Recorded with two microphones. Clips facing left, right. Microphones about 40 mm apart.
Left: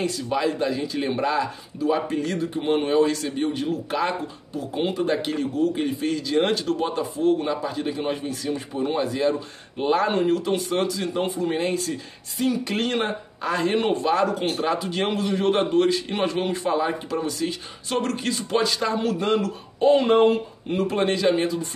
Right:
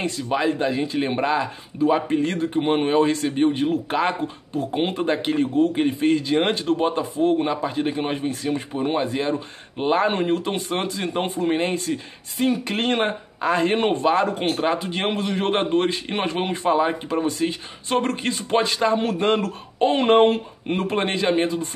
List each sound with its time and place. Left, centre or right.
0.3 s speech: right